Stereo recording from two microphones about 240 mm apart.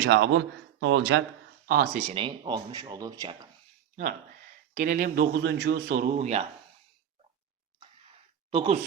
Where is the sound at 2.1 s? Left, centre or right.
Centre.